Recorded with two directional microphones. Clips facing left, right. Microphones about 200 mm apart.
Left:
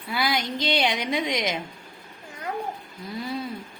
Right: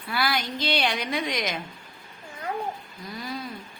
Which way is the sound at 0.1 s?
20° left (ahead or behind).